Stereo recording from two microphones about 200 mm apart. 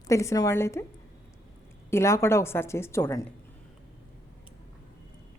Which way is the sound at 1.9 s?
15° left (ahead or behind).